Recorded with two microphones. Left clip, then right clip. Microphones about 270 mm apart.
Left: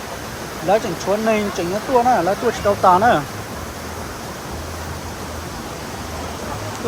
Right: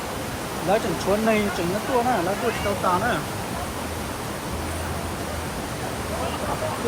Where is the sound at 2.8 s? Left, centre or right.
Centre.